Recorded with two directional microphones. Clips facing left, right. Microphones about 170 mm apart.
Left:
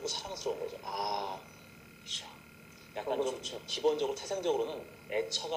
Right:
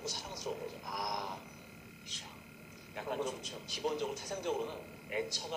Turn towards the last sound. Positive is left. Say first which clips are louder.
# left 4 dB
turn(degrees=25)  # may be behind; listen again after turning